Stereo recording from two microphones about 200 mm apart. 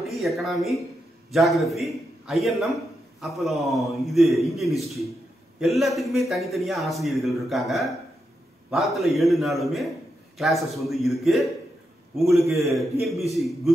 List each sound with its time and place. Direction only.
0.0 s a man's voice: centre (ahead or behind)